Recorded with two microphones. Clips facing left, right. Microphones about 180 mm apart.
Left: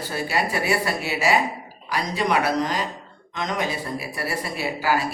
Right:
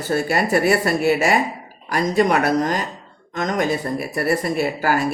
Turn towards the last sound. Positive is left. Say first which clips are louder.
# right 4 dB
turn(degrees=-50)  # may be behind; listen again after turning